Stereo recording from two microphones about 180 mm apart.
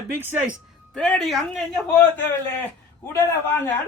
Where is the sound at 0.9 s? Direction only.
Centre (ahead or behind).